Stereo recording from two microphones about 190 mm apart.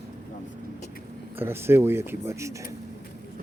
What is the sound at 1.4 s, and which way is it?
Speech, 10° right (ahead or behind).